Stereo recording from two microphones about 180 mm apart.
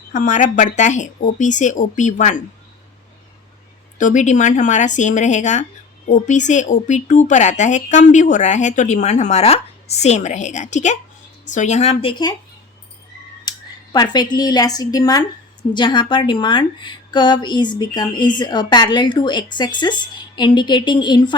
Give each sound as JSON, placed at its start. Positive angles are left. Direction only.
{"t": 0.1, "sound": "speech", "side_deg": 45}
{"t": 3.9, "sound": "speech", "side_deg": 45}
{"t": 13.5, "sound": "a sound", "side_deg": 25}
{"t": 13.9, "sound": "a woman's voice", "side_deg": 25}